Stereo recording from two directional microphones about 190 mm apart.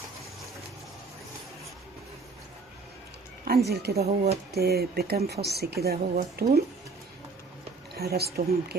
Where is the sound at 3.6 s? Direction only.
60° right (ahead or behind).